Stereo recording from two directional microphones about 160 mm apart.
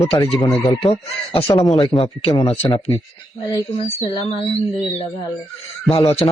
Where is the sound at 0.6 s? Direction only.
35° left (ahead or behind).